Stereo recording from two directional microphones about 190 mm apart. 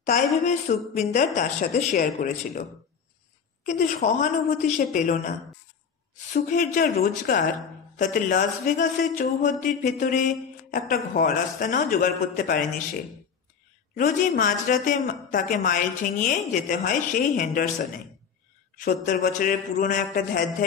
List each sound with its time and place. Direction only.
0.0 s a woman's voice: 40° left (ahead or behind)
3.6 s a woman's voice: 40° left (ahead or behind)